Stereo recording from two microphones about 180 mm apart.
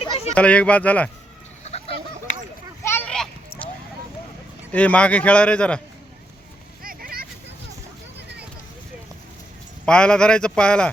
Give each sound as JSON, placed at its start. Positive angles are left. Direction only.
{"t": 0.3, "sound": "speech", "side_deg": 5}
{"t": 1.6, "sound": "fowl", "side_deg": 35}
{"t": 2.8, "sound": "a sound", "side_deg": 10}
{"t": 4.7, "sound": "speech", "side_deg": 10}
{"t": 6.8, "sound": "a sound", "side_deg": -55}
{"t": 9.8, "sound": "a man's voice", "side_deg": 5}